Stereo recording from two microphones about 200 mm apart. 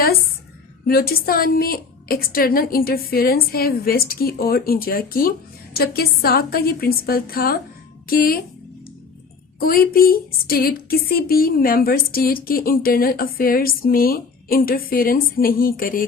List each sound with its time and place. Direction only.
0.9 s a woman's voice: 50° left (ahead or behind)
9.6 s a woman's voice: 45° left (ahead or behind)